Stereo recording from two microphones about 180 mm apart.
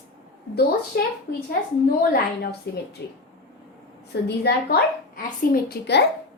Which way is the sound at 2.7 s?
65° left (ahead or behind).